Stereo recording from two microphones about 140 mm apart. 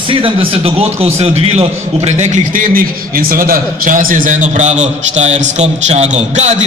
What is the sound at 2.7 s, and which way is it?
A man's voice, 90° right.